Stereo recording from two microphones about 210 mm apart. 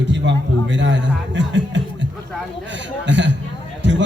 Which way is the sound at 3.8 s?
60° right (ahead or behind).